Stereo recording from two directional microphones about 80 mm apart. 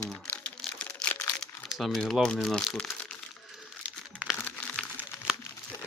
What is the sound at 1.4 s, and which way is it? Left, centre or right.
Crumpling, centre.